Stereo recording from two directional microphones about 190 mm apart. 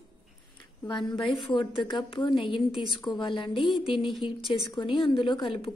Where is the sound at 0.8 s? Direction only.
25° left (ahead or behind).